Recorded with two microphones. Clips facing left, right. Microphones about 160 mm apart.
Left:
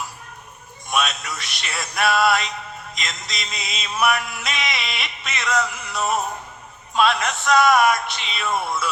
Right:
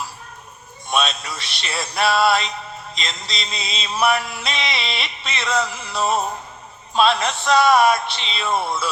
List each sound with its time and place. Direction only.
0.9 s music: 30° right (ahead or behind)